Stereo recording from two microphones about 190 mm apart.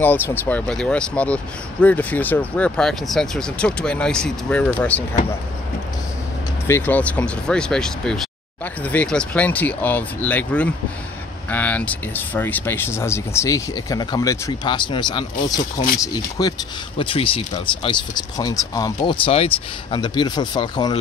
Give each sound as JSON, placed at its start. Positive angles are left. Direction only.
{"t": 0.0, "sound": "speech", "side_deg": 10}
{"t": 6.7, "sound": "speech", "side_deg": 10}